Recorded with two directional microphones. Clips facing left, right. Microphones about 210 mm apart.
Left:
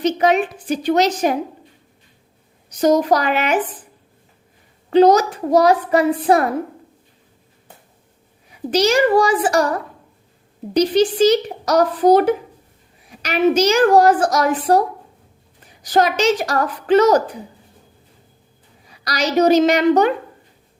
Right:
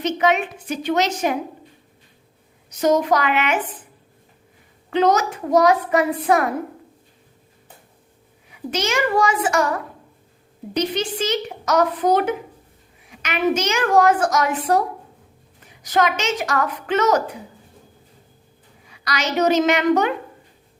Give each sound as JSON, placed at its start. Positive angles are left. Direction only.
{"t": 0.0, "sound": "a woman's voice", "side_deg": 35}
{"t": 2.6, "sound": "a woman's voice", "side_deg": 35}
{"t": 4.9, "sound": "a woman's voice", "side_deg": 35}
{"t": 8.7, "sound": "a woman's voice", "side_deg": 35}
{"t": 18.9, "sound": "a woman's voice", "side_deg": 35}